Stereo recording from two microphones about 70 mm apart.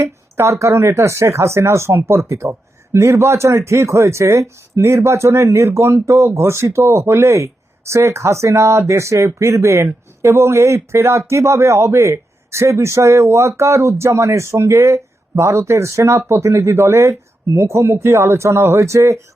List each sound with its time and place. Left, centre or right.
0.0 s a man's voice: right